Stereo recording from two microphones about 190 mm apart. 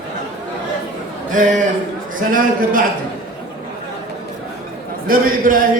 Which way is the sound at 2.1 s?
45° right (ahead or behind).